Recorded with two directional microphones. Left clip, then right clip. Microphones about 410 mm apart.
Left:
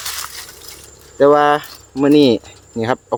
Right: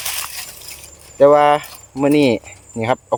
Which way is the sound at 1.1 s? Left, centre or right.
Centre.